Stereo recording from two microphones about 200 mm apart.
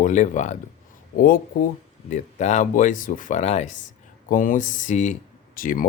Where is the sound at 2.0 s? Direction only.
35° left (ahead or behind).